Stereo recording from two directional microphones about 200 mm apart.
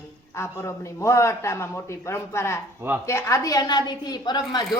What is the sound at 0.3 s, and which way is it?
A woman's voice, 15° left (ahead or behind).